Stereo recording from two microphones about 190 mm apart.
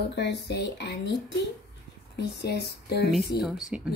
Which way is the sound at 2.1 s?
60° left (ahead or behind).